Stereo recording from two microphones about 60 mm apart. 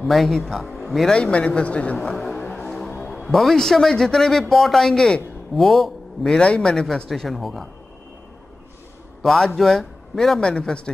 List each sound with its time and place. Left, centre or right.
0.0 s speech: centre
1.1 s speech: centre
2.0 s a man's voice: centre
9.2 s a man's voice: centre